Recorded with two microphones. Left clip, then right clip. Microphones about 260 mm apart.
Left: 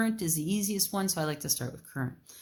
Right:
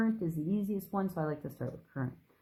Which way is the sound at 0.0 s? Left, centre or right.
Left.